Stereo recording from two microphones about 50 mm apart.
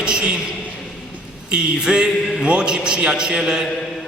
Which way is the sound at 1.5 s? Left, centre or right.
Centre.